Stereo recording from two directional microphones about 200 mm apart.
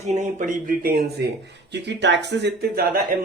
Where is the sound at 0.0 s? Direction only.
35° right (ahead or behind).